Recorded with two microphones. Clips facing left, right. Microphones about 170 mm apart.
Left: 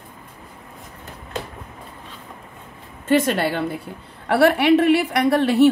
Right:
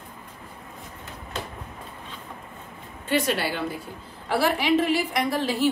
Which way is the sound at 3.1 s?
50° left (ahead or behind).